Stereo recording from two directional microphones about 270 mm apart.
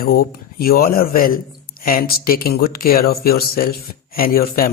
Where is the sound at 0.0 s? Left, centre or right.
Left.